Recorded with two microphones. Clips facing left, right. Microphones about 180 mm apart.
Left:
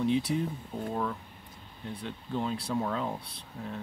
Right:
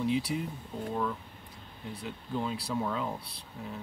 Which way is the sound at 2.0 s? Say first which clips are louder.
Left 1 dB; centre (ahead or behind).